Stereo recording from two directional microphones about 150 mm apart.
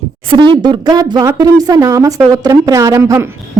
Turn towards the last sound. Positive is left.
turn(degrees=-20)  # may be behind; listen again after turning